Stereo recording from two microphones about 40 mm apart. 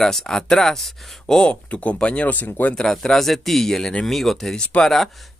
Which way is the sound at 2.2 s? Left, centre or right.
Left.